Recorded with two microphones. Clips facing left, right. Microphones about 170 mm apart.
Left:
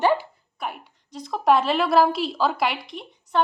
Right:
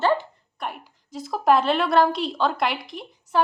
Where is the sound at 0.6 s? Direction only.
Centre (ahead or behind).